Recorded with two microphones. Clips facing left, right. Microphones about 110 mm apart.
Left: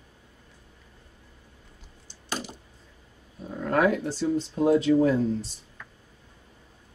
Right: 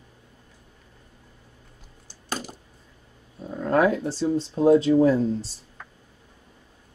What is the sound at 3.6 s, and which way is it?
Speech, 30° right (ahead or behind).